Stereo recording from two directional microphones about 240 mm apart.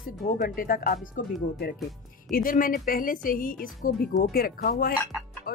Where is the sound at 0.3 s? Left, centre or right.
Left.